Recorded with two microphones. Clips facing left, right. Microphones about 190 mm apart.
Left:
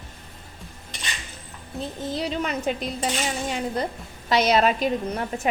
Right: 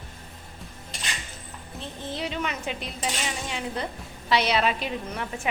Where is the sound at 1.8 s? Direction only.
40° left (ahead or behind).